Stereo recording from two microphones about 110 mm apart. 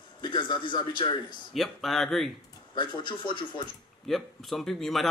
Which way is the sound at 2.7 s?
45° left (ahead or behind).